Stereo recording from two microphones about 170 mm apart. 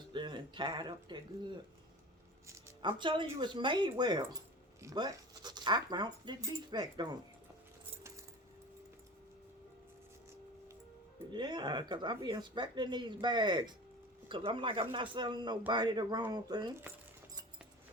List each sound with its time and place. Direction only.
0.1 s a sound: 25° right (ahead or behind)
2.8 s speech: 30° right (ahead or behind)
11.3 s speech: 25° right (ahead or behind)